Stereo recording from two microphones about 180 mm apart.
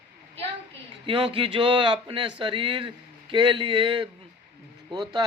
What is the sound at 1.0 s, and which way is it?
Speech, 30° right (ahead or behind).